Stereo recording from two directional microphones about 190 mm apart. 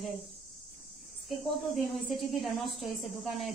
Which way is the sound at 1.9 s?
Centre (ahead or behind).